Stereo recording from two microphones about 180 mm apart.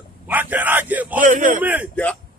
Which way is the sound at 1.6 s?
10° right (ahead or behind).